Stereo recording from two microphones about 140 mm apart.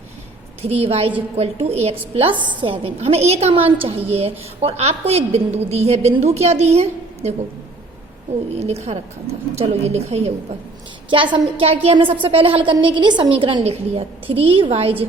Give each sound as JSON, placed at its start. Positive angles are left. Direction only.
{"t": 0.6, "sound": "a woman's voice", "side_deg": -45}
{"t": 8.5, "sound": "a woman's voice", "side_deg": -50}
{"t": 11.1, "sound": "a woman's voice", "side_deg": -35}
{"t": 11.6, "sound": "a woman's voice", "side_deg": -45}